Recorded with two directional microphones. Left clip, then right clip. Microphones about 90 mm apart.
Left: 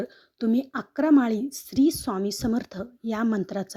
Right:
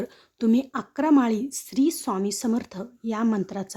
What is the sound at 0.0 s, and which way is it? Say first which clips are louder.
A woman's voice: right 2 dB; 20° left (ahead or behind).